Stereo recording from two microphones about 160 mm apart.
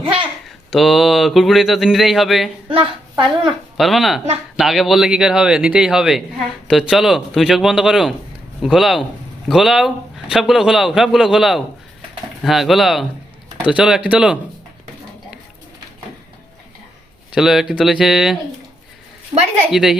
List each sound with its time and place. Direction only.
0.0 s babbling: 35° right (ahead or behind)
0.4 s speech: centre (ahead or behind)
2.6 s a woman's voice: 35° right (ahead or behind)
3.8 s speech: centre (ahead or behind)
17.3 s speech: centre (ahead or behind)
19.3 s a woman's voice: 25° right (ahead or behind)
19.7 s speech: 5° right (ahead or behind)